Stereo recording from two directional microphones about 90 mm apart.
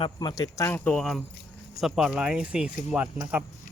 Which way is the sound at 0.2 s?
50° left (ahead or behind).